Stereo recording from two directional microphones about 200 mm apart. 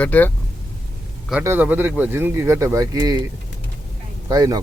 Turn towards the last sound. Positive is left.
turn(degrees=-15)  # may be behind; listen again after turning